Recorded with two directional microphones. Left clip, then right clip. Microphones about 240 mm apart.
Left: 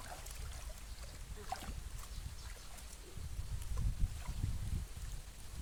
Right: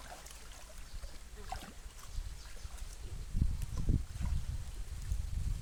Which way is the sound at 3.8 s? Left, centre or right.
Centre.